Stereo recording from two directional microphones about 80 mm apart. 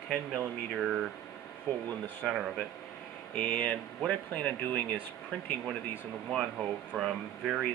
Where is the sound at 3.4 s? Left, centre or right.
Centre.